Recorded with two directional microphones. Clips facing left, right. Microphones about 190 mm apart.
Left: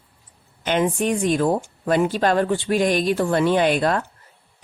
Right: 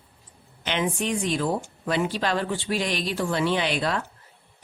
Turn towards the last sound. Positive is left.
turn(degrees=50)  # may be behind; listen again after turning